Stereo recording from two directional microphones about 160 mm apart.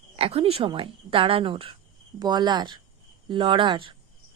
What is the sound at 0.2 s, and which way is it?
Speech, 40° right (ahead or behind).